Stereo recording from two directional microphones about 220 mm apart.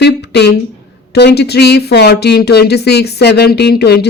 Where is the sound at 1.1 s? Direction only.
50° left (ahead or behind).